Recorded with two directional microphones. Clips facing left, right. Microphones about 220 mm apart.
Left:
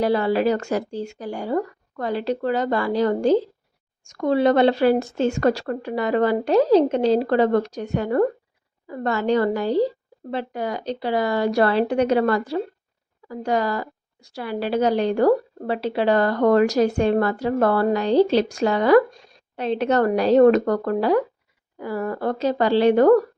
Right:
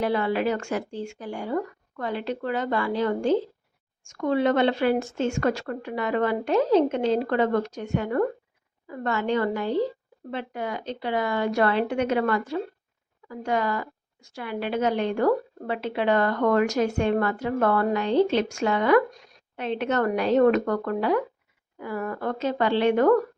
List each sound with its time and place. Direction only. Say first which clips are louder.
0.0 s a woman's voice: left 5 dB; 35° left (ahead or behind)